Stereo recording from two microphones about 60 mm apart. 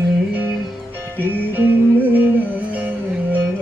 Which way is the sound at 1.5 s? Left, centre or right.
Right.